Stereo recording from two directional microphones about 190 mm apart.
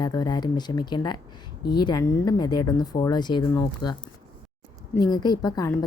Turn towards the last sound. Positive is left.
turn(degrees=20)  # may be behind; listen again after turning